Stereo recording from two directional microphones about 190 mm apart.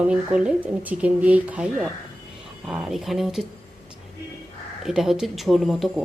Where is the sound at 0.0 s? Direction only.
5° right (ahead or behind).